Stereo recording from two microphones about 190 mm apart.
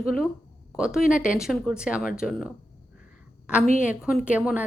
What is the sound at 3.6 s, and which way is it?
Speech, 45° left (ahead or behind).